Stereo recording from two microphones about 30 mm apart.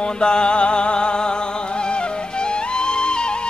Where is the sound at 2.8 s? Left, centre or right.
Left.